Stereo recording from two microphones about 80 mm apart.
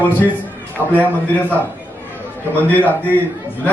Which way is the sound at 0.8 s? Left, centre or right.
Right.